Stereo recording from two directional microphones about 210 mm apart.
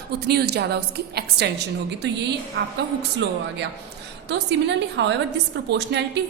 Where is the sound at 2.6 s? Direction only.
55° right (ahead or behind).